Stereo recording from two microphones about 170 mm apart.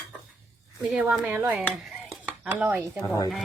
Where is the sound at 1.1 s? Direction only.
5° right (ahead or behind).